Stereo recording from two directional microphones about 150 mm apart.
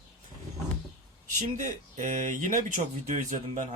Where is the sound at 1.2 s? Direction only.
55° right (ahead or behind).